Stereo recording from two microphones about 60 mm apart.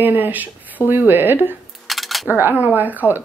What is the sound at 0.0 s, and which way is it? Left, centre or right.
Speech, right.